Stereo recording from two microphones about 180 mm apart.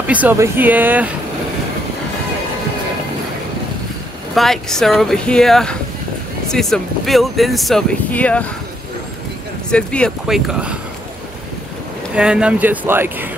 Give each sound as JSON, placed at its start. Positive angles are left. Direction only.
{"t": 0.0, "sound": "speech", "side_deg": -10}
{"t": 4.4, "sound": "speech", "side_deg": 0}
{"t": 9.7, "sound": "speech", "side_deg": 5}
{"t": 12.2, "sound": "speech", "side_deg": -5}